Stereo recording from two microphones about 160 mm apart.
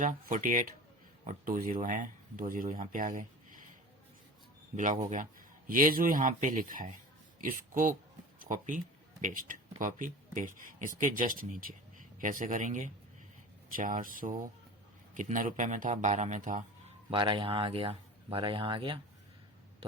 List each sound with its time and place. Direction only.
0.0 s a man's voice: 55° right (ahead or behind)
4.8 s a man's voice: 50° right (ahead or behind)
17.1 s speech: 30° right (ahead or behind)